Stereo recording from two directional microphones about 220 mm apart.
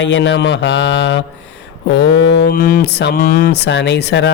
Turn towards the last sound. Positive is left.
turn(degrees=50)  # may be behind; listen again after turning